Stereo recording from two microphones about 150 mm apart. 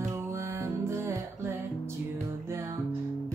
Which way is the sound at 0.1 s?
20° right (ahead or behind).